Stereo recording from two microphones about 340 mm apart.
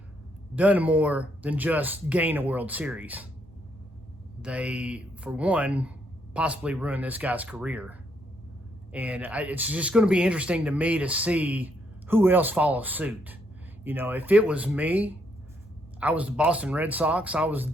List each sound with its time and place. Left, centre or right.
0.5 s speech: centre
4.4 s speech: centre